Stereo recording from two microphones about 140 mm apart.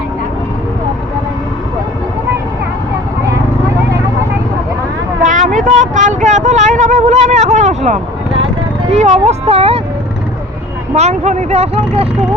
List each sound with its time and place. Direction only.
5.2 s vehicle: 65° right (ahead or behind)
8.9 s speech: 55° right (ahead or behind)
10.9 s speech: 55° right (ahead or behind)